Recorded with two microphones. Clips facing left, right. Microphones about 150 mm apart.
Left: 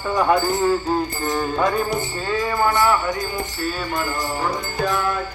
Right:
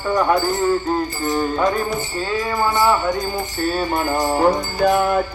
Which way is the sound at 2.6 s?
15° right (ahead or behind).